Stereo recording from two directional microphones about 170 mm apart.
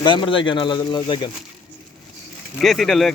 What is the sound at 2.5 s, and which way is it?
Speech, centre (ahead or behind).